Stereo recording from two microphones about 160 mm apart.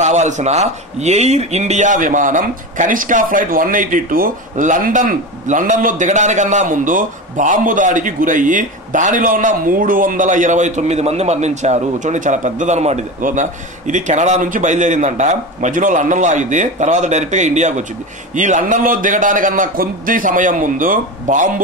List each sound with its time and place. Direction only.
0.0 s a man's voice: 45° right (ahead or behind)